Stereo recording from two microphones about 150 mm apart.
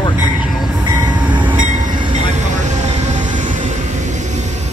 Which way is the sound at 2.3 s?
55° right (ahead or behind).